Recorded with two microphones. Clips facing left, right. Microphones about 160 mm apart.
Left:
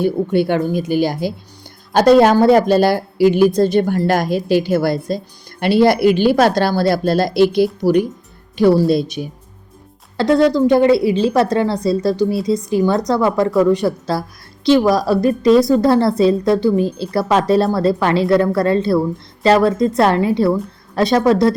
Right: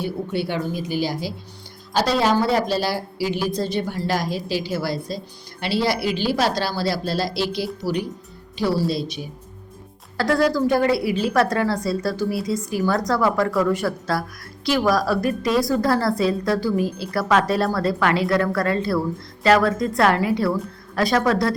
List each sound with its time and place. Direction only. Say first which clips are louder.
0.0 s a woman's voice: left 9 dB; 55° left (ahead or behind)
10.2 s a woman's voice: left 6 dB; 25° left (ahead or behind)